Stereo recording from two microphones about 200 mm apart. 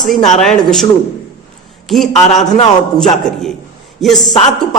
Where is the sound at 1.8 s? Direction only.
Centre (ahead or behind).